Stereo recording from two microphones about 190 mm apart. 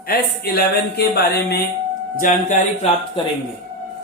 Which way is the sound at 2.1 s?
45° left (ahead or behind).